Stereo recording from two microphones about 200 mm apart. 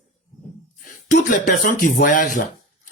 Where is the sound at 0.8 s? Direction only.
40° left (ahead or behind).